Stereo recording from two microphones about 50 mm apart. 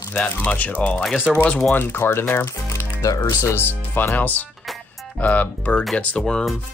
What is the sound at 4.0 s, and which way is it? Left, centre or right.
Speech, left.